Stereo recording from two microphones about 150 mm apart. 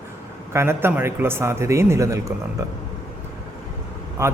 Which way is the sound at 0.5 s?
15° right (ahead or behind).